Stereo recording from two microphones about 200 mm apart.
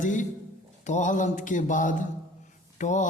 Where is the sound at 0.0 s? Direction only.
40° left (ahead or behind).